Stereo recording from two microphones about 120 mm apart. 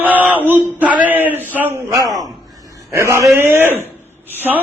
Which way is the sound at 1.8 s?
30° right (ahead or behind).